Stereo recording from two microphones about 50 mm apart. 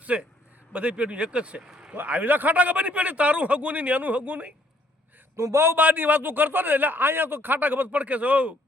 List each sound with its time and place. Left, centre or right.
0.0 s a sound: right
0.7 s a man's voice: right
2.0 s a man's voice: right
5.4 s a man's voice: right
5.6 s a man's voice: right
7.9 s a man's voice: right